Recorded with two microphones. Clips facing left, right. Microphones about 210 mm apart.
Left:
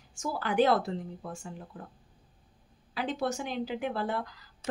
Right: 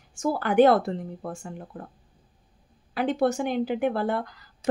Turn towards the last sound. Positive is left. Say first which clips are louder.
# right 5 dB
turn(degrees=-55)  # may be behind; listen again after turning